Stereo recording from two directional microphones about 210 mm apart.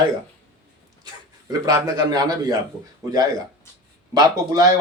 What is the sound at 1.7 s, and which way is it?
Speech, 15° right (ahead or behind).